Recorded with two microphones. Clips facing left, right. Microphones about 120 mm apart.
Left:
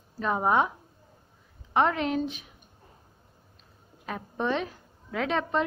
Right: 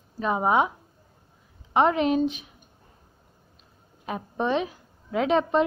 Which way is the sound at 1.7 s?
20° right (ahead or behind).